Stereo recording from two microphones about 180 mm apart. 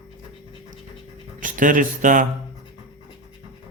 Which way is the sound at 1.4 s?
45° right (ahead or behind).